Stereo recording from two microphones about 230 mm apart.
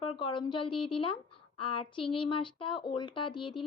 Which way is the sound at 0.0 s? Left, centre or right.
Left.